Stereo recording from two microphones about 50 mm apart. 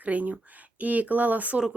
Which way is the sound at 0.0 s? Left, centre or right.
Right.